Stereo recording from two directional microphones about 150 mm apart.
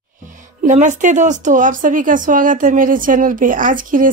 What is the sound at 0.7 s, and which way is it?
Speech, 55° right (ahead or behind).